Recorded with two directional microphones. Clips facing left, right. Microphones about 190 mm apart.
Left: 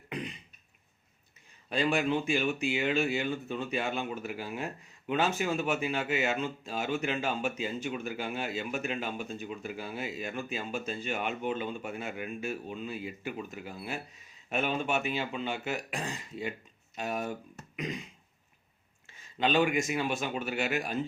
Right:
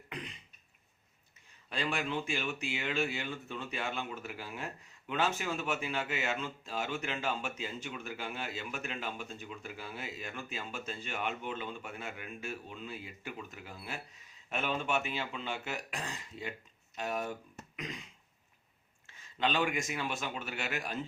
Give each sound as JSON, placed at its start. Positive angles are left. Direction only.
{"t": 1.7, "sound": "speech", "side_deg": 15}
{"t": 19.4, "sound": "speech", "side_deg": 15}